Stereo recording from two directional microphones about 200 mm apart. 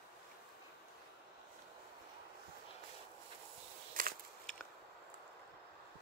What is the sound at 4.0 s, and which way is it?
Biting, 45° right (ahead or behind).